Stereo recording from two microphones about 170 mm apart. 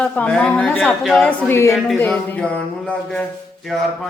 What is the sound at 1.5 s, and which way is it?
Speech, 15° left (ahead or behind).